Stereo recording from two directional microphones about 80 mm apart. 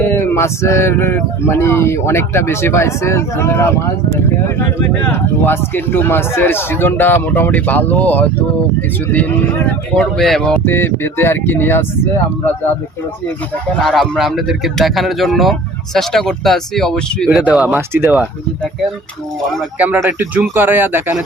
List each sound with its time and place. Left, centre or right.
0.0 s a man's voice: left
9.9 s speech: centre
10.5 s a man's voice: left
13.8 s speech: centre
17.4 s speech: centre
17.7 s speech: right
19.8 s speech: right